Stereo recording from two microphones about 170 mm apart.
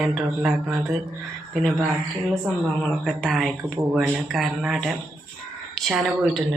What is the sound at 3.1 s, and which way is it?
Speech, centre (ahead or behind).